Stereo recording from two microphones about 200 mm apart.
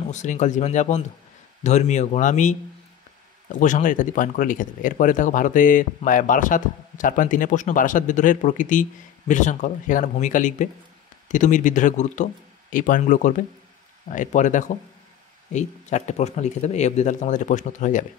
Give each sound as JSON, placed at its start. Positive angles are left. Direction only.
{"t": 0.1, "sound": "speech", "side_deg": 35}
{"t": 3.5, "sound": "speech", "side_deg": 40}